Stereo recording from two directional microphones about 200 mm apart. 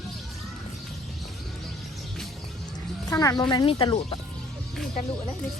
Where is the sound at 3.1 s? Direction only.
20° left (ahead or behind).